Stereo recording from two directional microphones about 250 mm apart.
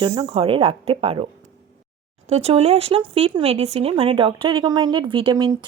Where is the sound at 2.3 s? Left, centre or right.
Right.